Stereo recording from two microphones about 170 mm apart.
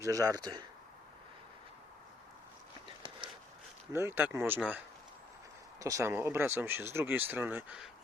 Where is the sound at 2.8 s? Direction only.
30° right (ahead or behind).